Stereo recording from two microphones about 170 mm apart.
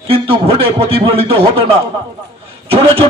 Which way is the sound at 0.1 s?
35° right (ahead or behind).